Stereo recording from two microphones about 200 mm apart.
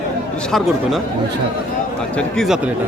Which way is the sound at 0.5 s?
Centre (ahead or behind).